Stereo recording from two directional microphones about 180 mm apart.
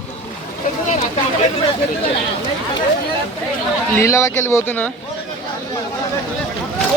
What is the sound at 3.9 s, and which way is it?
Speech, 15° left (ahead or behind).